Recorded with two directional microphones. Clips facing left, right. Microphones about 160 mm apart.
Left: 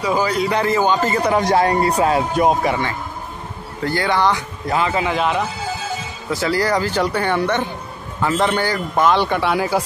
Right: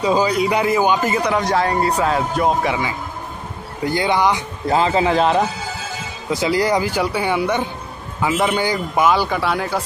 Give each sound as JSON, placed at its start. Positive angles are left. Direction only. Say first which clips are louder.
{"t": 0.0, "sound": "speech", "louder": "right 2 dB", "side_deg": -20}
{"t": 1.6, "sound": "speech", "louder": "left 2 dB", "side_deg": 35}
{"t": 2.6, "sound": "a man's voice", "louder": "left 1 dB", "side_deg": -5}
{"t": 3.8, "sound": "speech", "louder": "right 1 dB", "side_deg": -15}
{"t": 4.6, "sound": "a man's voice", "louder": "right 3 dB", "side_deg": -30}
{"t": 6.3, "sound": "speech", "louder": "right 1 dB", "side_deg": -15}